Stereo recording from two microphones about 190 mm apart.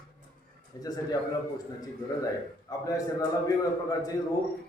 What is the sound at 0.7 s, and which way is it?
Speech, 20° left (ahead or behind).